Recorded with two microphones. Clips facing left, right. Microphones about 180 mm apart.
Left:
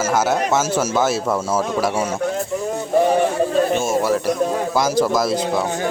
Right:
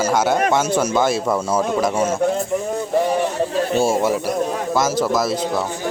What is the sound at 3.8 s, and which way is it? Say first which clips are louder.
Speech: right 2 dB; 30° right (ahead or behind).